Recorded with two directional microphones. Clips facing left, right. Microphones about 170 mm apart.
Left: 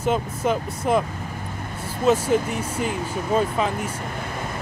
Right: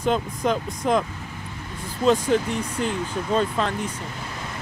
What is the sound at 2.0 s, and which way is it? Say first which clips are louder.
Speech: even; 5° left (ahead or behind).